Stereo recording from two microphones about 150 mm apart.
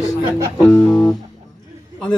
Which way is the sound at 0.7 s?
5° left (ahead or behind).